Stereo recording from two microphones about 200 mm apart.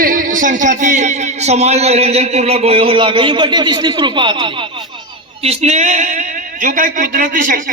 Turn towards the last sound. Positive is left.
turn(degrees=-40)  # may be behind; listen again after turning